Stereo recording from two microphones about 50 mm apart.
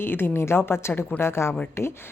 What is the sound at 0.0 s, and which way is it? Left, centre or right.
Speech, left.